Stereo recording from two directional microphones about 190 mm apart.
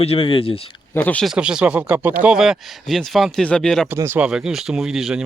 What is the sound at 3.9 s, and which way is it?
Speech, 10° right (ahead or behind).